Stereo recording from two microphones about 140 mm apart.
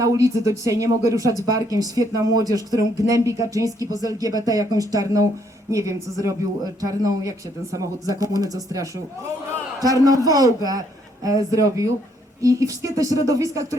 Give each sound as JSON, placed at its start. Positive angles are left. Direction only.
{"t": 0.0, "sound": "speech", "side_deg": -25}